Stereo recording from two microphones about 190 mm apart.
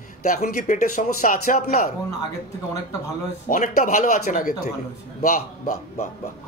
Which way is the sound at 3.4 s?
45° left (ahead or behind).